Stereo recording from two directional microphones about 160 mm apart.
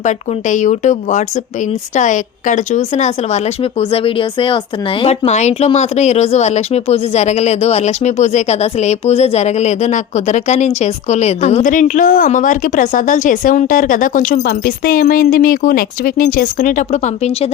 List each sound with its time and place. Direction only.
0.0 s speech: 50° left (ahead or behind)